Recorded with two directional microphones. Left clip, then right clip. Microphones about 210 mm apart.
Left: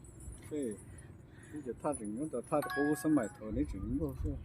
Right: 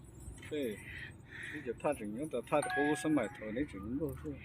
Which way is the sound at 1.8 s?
45° left (ahead or behind).